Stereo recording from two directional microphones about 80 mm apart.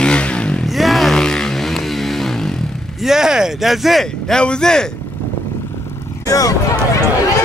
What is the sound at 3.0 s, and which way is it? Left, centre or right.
Speech, centre.